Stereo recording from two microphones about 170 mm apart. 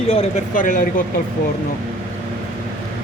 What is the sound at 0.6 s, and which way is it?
Speech, 55° left (ahead or behind).